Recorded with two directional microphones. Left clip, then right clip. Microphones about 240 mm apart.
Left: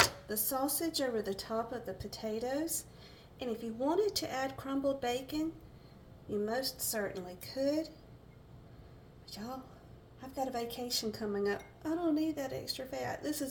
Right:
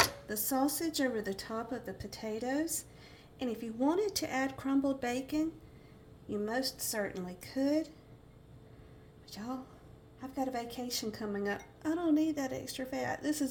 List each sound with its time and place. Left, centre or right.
0.3 s speech: right
9.3 s speech: right